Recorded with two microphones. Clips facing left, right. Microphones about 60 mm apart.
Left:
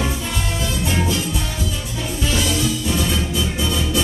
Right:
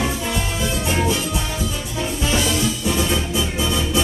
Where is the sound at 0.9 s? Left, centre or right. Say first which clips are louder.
Right 2 dB; centre.